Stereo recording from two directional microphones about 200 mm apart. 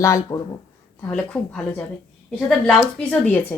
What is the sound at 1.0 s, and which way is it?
A woman's voice, 5° left (ahead or behind).